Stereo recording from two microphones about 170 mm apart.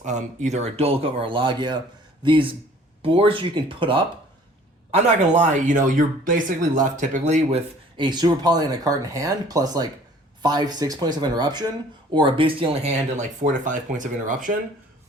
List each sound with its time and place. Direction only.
0.0 s speech: 45° right (ahead or behind); by 4.0 s 30° right (ahead or behind)
4.9 s speech: 40° right (ahead or behind)
7.9 s speech: 25° right (ahead or behind); by 14.5 s 50° right (ahead or behind)